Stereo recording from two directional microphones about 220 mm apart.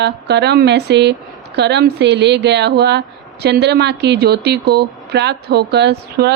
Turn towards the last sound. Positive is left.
turn(degrees=-50)  # may be behind; listen again after turning